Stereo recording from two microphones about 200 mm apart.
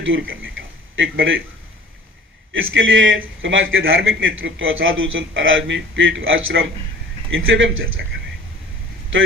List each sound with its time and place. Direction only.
0.0 s a sound: 75° right (ahead or behind)
0.9 s a man's voice: 70° right (ahead or behind)
2.5 s a man's voice: 75° right (ahead or behind)
9.1 s a man's voice: 75° right (ahead or behind)